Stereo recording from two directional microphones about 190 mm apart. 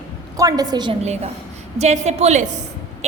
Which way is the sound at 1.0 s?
35° right (ahead or behind).